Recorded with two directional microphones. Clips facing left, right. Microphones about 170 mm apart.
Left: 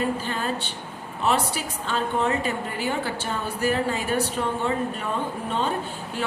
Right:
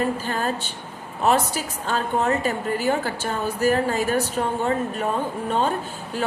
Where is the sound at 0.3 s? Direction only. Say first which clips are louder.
Right 2 dB; 45° right (ahead or behind).